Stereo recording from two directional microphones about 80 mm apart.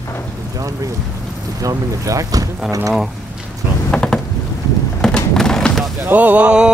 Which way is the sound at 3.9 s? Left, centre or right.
Centre.